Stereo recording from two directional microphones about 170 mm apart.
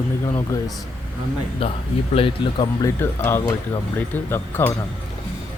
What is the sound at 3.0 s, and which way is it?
Speech, 15° left (ahead or behind).